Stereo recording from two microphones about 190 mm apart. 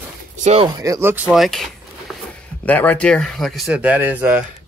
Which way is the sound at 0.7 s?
15° right (ahead or behind).